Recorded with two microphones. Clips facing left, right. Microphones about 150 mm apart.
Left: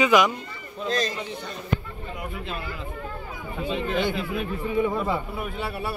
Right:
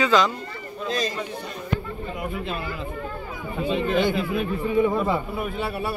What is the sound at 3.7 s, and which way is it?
Speech, 50° right (ahead or behind).